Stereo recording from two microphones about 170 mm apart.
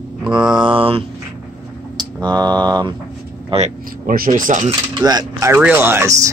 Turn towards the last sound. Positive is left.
turn(degrees=-15)  # may be behind; listen again after turning